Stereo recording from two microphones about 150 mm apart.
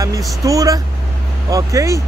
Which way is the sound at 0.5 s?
25° right (ahead or behind).